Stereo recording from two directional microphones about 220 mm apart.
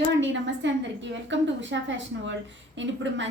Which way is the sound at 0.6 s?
55° right (ahead or behind).